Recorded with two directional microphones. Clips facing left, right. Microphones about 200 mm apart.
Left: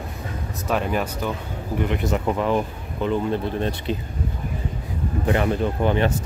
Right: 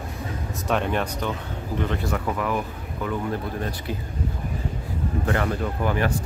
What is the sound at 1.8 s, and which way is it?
Speech, 20° left (ahead or behind).